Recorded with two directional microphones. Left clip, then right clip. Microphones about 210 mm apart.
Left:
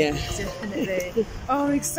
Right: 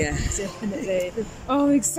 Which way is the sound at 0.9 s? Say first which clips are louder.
Right 1 dB; 20° right (ahead or behind).